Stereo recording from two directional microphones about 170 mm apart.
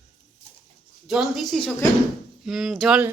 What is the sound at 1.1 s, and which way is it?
Speech, centre (ahead or behind).